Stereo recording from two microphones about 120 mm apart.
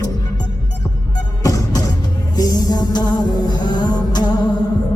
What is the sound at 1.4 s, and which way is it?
Music, 30° left (ahead or behind).